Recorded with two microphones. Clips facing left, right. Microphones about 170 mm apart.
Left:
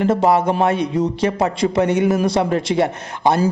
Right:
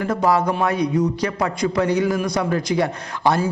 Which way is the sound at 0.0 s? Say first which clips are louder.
Left 3 dB; 25° left (ahead or behind).